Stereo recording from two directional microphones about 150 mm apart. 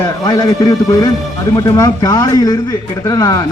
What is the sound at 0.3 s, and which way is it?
A man's voice, 20° left (ahead or behind).